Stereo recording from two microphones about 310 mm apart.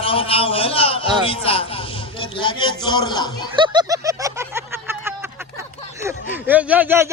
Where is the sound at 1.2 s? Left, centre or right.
Centre.